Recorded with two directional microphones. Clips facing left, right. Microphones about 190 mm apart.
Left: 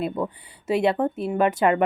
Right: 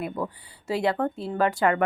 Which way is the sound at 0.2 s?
25° left (ahead or behind).